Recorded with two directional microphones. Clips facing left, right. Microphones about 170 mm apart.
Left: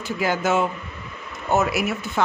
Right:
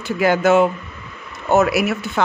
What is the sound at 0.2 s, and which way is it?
Speech, 65° right (ahead or behind).